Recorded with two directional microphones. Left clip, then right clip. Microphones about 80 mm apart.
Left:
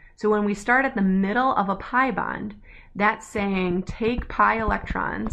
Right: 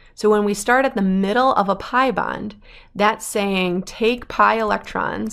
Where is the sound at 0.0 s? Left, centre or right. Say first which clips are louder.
Right 6 dB; centre.